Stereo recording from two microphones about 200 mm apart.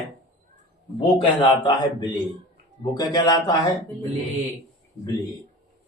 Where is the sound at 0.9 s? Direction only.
25° left (ahead or behind).